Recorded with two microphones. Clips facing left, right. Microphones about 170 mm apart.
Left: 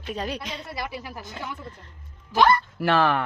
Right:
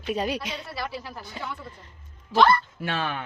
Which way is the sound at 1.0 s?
5° left (ahead or behind).